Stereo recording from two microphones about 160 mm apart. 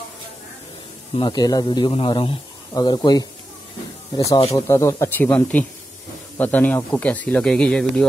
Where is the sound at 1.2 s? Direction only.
25° left (ahead or behind).